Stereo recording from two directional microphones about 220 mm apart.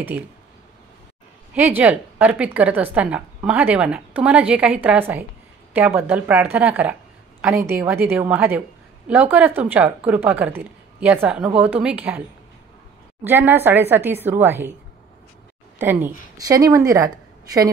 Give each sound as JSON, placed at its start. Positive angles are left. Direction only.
{"t": 1.5, "sound": "a woman's voice", "side_deg": -10}
{"t": 13.2, "sound": "a woman's voice", "side_deg": -10}
{"t": 15.8, "sound": "a woman's voice", "side_deg": -10}